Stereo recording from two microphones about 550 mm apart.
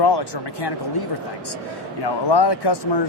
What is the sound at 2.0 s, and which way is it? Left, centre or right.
Speech, left.